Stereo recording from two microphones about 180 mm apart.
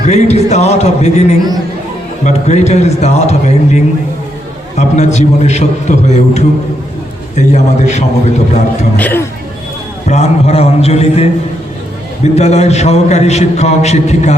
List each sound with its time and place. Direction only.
0.0 s a man's voice: 40° left (ahead or behind)
4.8 s a man's voice: 40° left (ahead or behind)
9.0 s speech: 10° left (ahead or behind)
10.1 s a man's voice: 35° left (ahead or behind)